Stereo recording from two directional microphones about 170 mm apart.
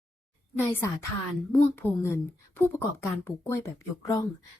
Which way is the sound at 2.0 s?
15° left (ahead or behind).